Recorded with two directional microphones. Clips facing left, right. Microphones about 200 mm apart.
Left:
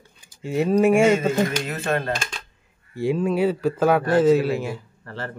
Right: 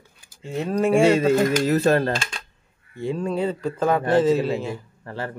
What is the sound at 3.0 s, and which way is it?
Speech, 10° left (ahead or behind).